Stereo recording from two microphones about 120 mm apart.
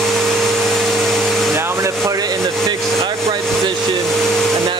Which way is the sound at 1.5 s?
20° right (ahead or behind).